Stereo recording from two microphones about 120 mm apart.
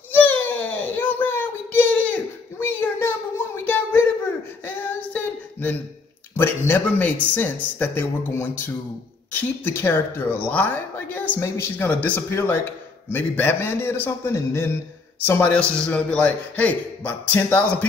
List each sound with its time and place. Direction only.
0.1 s a sound: 15° left (ahead or behind)
4.6 s female singing: 15° left (ahead or behind)
6.3 s a man's voice: 20° left (ahead or behind)